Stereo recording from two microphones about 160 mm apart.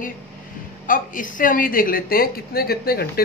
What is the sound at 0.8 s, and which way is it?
A woman's voice, 55° left (ahead or behind).